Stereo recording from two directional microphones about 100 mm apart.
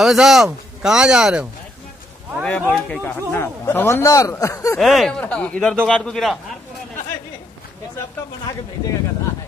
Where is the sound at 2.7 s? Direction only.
15° left (ahead or behind); by 4.7 s 35° left (ahead or behind).